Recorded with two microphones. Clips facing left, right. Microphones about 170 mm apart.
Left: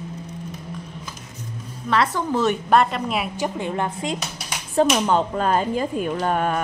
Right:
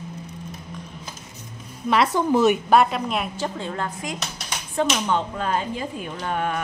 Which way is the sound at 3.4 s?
15° left (ahead or behind).